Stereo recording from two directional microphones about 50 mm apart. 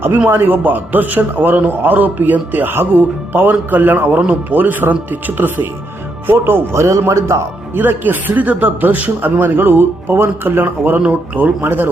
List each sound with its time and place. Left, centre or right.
0.3 s a man's voice: right
6.3 s speech: right
7.1 s speech: right
7.8 s a man's voice: right